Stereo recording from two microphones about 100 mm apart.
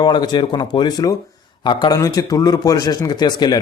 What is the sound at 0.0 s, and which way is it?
A man's voice, 45° left (ahead or behind).